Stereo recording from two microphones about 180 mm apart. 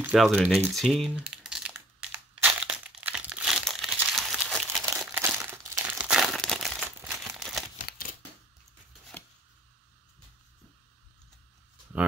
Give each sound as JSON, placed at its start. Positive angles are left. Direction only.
{"t": 0.0, "sound": "speech", "side_deg": -5}
{"t": 1.1, "sound": "crumpling", "side_deg": -5}
{"t": 7.9, "sound": "a sound", "side_deg": 60}